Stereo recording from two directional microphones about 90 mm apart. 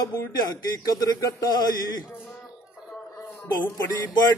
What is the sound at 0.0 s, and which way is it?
Speech, 45° left (ahead or behind).